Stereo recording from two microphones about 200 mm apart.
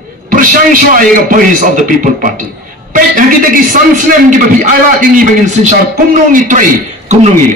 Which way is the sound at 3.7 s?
40° right (ahead or behind).